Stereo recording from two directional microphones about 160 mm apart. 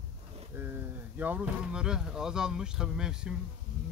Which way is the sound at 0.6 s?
15° right (ahead or behind).